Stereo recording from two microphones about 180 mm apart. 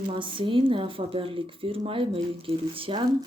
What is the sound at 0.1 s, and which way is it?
Speech, 30° right (ahead or behind).